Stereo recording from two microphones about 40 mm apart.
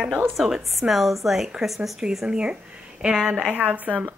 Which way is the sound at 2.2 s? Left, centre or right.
Right.